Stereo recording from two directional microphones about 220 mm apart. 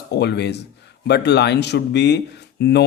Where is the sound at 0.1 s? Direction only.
50° left (ahead or behind).